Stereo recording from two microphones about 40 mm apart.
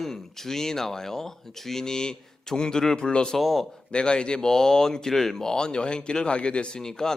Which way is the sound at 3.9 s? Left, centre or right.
Left.